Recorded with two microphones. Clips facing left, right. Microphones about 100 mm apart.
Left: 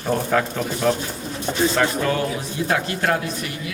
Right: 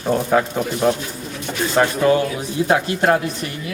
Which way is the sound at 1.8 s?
30° right (ahead or behind).